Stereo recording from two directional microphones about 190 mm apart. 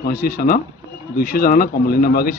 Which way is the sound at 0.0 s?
50° left (ahead or behind).